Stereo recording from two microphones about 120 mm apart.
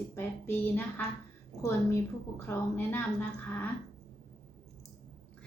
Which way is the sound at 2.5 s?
15° left (ahead or behind).